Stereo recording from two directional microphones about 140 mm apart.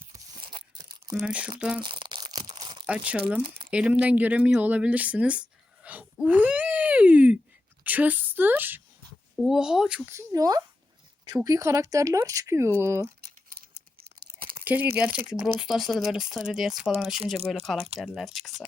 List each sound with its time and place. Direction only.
1.1 s speech: 5° right (ahead or behind)
1.8 s crumpling: 35° right (ahead or behind)
2.8 s a woman's voice: 10° right (ahead or behind)
9.3 s speech: centre (ahead or behind)
10.1 s speech: 20° right (ahead or behind)
14.6 s crumpling: 10° right (ahead or behind)
14.9 s speech: 10° right (ahead or behind)